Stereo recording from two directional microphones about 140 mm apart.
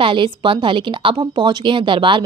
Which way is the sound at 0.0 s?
35° right (ahead or behind).